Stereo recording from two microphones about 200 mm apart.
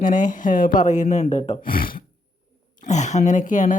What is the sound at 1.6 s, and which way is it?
Speech, 45° left (ahead or behind).